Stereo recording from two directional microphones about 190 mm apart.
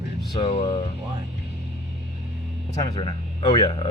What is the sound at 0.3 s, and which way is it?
Speech, 35° left (ahead or behind).